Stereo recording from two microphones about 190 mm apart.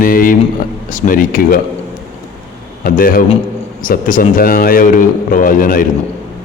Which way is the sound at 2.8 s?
50° left (ahead or behind).